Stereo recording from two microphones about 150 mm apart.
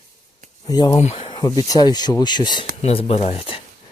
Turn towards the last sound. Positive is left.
turn(degrees=40)  # may be behind; listen again after turning